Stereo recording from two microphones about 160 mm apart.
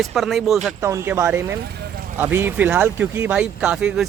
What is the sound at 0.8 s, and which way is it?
Speech, 15° right (ahead or behind).